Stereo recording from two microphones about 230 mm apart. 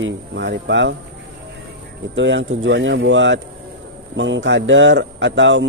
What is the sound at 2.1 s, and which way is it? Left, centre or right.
Speech, right.